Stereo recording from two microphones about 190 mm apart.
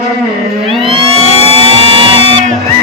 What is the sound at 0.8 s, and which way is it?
Vehicle, 30° right (ahead or behind).